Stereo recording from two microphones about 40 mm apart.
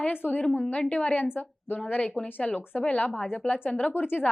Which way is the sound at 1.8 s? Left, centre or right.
Left.